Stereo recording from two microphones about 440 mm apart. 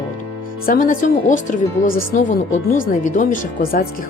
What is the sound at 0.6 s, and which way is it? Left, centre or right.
Speech, centre.